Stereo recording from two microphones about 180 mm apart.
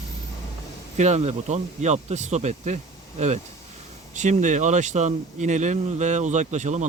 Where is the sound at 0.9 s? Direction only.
40° right (ahead or behind).